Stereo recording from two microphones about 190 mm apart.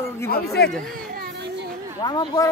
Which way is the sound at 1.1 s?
60° right (ahead or behind).